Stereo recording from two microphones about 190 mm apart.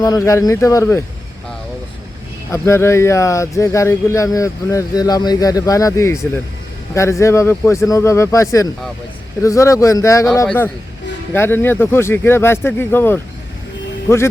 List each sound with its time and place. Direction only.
0.0 s speech: 15° left (ahead or behind)
2.5 s speech: 15° left (ahead or behind)